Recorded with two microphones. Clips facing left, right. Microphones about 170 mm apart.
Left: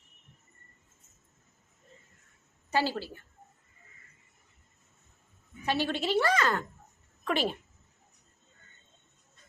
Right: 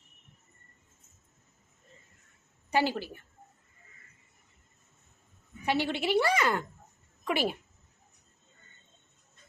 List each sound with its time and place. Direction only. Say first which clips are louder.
2.6 s a woman's voice: right 1 dB; 15° right (ahead or behind)
5.6 s a woman's voice: right 1 dB; 15° right (ahead or behind)